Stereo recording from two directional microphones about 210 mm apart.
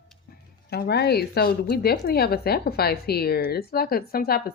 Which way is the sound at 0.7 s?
50° left (ahead or behind).